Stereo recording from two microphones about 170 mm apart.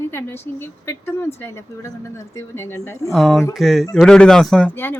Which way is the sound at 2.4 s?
15° left (ahead or behind).